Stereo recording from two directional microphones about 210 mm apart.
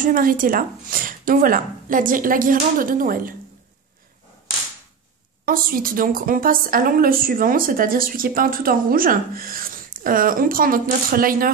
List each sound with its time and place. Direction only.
0.0 s speech: 40° right (ahead or behind)
5.4 s a woman's voice: 45° right (ahead or behind)